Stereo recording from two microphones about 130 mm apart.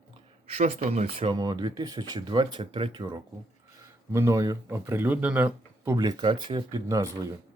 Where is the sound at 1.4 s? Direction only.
30° right (ahead or behind).